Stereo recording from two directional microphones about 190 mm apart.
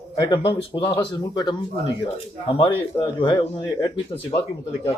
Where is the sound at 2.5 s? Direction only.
25° left (ahead or behind).